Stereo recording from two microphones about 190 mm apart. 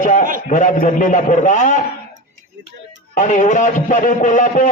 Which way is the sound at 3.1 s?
40° left (ahead or behind).